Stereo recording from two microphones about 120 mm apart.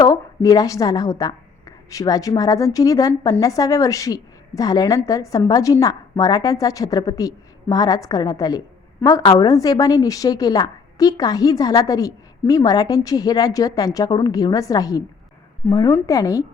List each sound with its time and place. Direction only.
0.0 s a woman's voice: 30° left (ahead or behind)
15.6 s a woman's voice: 20° left (ahead or behind)